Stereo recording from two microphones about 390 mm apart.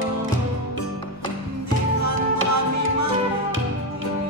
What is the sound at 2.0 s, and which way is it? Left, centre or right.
Music, right.